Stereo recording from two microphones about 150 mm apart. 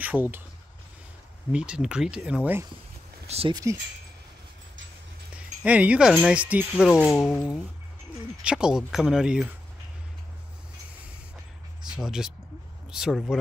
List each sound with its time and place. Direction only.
0.0 s speech: 10° right (ahead or behind)
1.5 s speech: 5° right (ahead or behind)
3.3 s speech: 40° right (ahead or behind)
5.6 s speech: 10° right (ahead or behind)
7.2 s speech: 10° left (ahead or behind)
8.5 s speech: 5° right (ahead or behind)
11.8 s speech: 5° right (ahead or behind)